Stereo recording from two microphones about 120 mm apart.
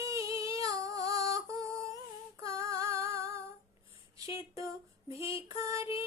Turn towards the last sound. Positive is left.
turn(degrees=-25)  # may be behind; listen again after turning